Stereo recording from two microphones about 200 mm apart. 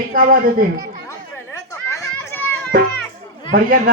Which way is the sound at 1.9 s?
15° left (ahead or behind).